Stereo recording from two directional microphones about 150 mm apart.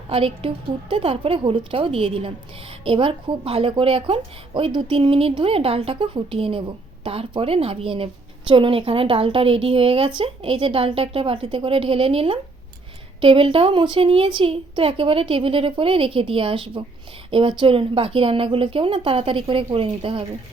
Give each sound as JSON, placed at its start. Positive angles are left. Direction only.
{"t": 0.1, "sound": "a woman's voice", "side_deg": -40}